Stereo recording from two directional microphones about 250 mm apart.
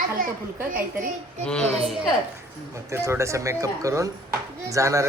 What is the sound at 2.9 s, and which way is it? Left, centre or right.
Speech, centre.